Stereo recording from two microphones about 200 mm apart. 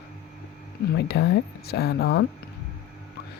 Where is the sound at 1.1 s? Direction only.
55° left (ahead or behind).